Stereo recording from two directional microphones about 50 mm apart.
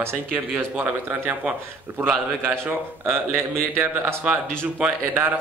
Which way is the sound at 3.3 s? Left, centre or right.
Right.